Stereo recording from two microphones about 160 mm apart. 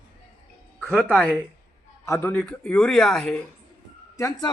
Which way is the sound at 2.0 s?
15° left (ahead or behind).